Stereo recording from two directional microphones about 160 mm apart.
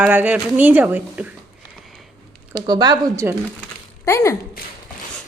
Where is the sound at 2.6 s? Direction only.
25° right (ahead or behind).